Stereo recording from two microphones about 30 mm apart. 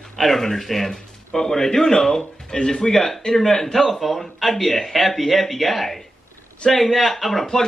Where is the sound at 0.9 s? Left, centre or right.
Centre.